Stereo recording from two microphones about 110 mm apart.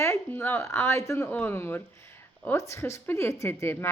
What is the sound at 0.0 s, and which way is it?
A woman's voice, 20° left (ahead or behind).